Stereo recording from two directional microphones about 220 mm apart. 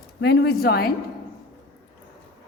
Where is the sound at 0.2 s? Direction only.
50° left (ahead or behind).